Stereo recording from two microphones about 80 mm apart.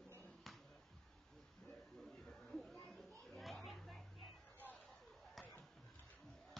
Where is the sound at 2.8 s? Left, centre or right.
Centre.